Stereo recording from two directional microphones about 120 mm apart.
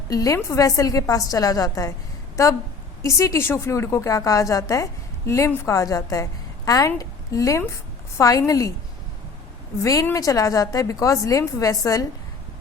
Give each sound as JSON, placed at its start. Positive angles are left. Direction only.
{"t": 0.1, "sound": "a woman's voice", "side_deg": 30}
{"t": 9.8, "sound": "a woman's voice", "side_deg": 30}